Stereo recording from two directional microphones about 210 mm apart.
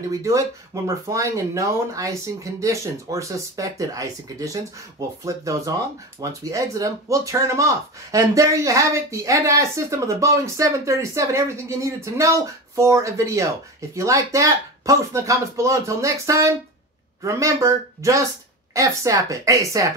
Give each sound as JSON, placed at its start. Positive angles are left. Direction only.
{"t": 0.1, "sound": "speech", "side_deg": -15}